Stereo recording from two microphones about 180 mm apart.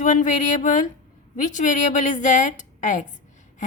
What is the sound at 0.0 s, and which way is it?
A woman's voice, 45° left (ahead or behind).